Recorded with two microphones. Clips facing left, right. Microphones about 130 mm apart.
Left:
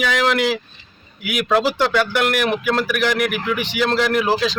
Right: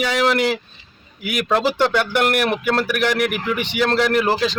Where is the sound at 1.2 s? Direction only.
5° left (ahead or behind).